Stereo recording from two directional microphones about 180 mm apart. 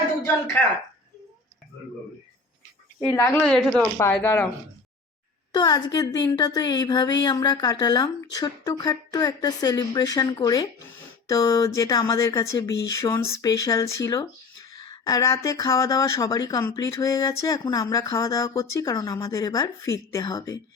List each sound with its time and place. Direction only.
0.3 s speech: 10° left (ahead or behind)
3.1 s speech: 15° left (ahead or behind)
3.3 s speech: centre (ahead or behind)
5.5 s speech: 25° left (ahead or behind)